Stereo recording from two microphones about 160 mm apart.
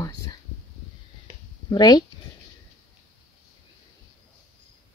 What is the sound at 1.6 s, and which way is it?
Speech, 25° left (ahead or behind).